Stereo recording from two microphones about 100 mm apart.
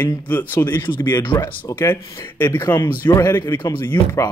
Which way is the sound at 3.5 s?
45° left (ahead or behind).